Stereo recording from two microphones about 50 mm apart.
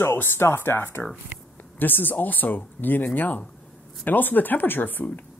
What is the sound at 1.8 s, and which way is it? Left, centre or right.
Speech, left.